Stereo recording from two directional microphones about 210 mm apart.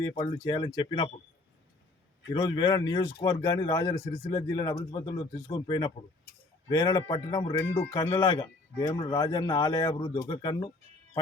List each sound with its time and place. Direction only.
0.1 s speech: 25° left (ahead or behind)
2.3 s speech: 20° left (ahead or behind)